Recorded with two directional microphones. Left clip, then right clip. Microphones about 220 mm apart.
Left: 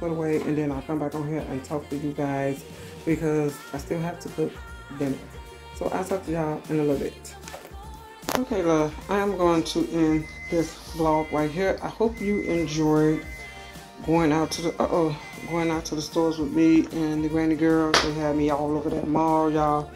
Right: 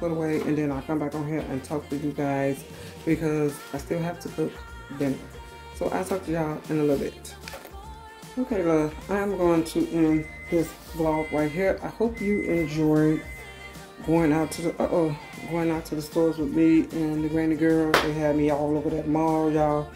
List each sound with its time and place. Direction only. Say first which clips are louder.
0.0 s speech: left 1 dB; centre (ahead or behind)
8.5 s speech: right 1 dB; 5° right (ahead or behind)